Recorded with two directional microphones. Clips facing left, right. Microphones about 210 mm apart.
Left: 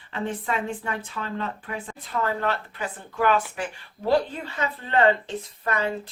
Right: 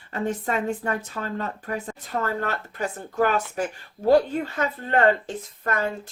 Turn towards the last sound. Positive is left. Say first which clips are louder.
# even
turn(degrees=-45)  # may be behind; listen again after turning